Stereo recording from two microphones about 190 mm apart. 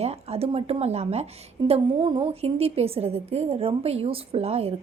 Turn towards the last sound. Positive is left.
turn(degrees=-30)  # may be behind; listen again after turning